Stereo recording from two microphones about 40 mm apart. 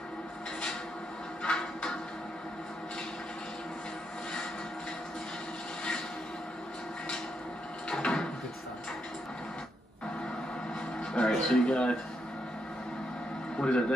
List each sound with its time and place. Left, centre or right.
1.4 s a sound: left
7.9 s drawer open or close: left
11.0 s music: centre
13.6 s a man's voice: left